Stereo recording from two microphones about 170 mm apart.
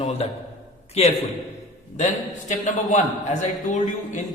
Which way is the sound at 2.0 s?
45° left (ahead or behind).